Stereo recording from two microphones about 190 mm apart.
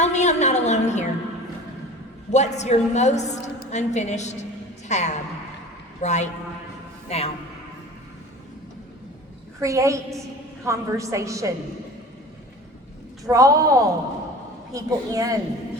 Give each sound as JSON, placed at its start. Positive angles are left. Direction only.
{"t": 0.0, "sound": "a sound", "side_deg": 35}
{"t": 2.3, "sound": "a woman's voice", "side_deg": 35}
{"t": 9.6, "sound": "a woman's voice", "side_deg": -15}
{"t": 13.2, "sound": "a woman's voice", "side_deg": -20}